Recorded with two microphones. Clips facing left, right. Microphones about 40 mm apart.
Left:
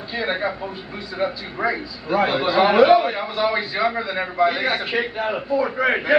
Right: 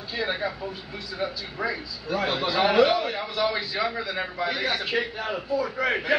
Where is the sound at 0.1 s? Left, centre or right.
Left.